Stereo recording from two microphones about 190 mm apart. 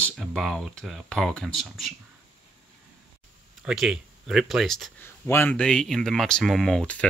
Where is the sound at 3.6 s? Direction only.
5° right (ahead or behind).